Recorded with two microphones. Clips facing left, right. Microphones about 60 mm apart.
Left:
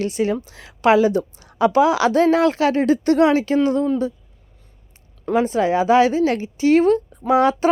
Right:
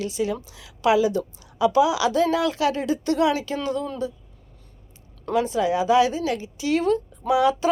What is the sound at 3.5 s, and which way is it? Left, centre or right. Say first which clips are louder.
Speech: left 9 dB; left.